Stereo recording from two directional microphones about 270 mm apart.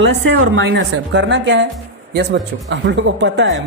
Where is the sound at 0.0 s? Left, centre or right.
Right.